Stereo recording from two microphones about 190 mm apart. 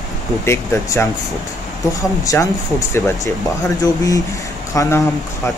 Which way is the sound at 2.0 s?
15° left (ahead or behind).